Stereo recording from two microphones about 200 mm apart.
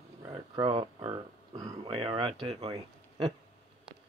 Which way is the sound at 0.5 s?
25° right (ahead or behind).